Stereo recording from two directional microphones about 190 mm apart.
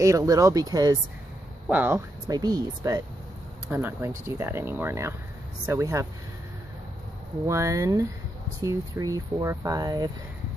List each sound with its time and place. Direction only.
0.0 s speech: 15° right (ahead or behind)
7.4 s speech: 15° right (ahead or behind)